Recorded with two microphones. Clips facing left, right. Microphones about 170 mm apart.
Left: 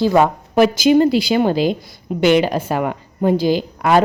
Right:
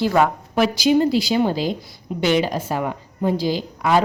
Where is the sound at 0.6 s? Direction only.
55° left (ahead or behind).